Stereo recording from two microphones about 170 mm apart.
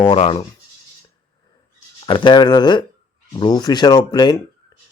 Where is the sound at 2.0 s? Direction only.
25° left (ahead or behind).